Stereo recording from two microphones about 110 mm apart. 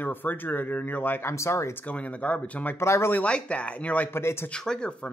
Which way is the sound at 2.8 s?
25° left (ahead or behind).